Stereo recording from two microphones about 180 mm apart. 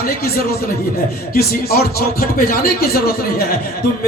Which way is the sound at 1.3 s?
60° left (ahead or behind).